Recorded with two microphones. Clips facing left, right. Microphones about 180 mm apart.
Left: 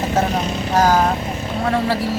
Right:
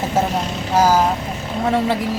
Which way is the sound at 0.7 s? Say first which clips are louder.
Right 1 dB; 5° right (ahead or behind).